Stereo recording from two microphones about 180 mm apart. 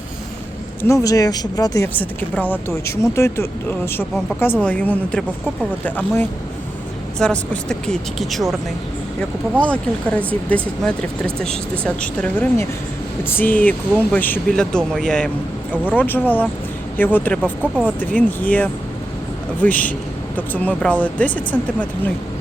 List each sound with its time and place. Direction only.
0.8 s speech: 15° left (ahead or behind)
9.6 s speech: 5° left (ahead or behind)